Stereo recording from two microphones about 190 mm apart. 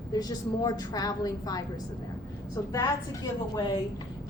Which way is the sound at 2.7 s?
20° left (ahead or behind).